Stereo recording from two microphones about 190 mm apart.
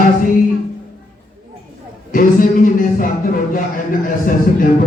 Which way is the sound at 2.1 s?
45° left (ahead or behind).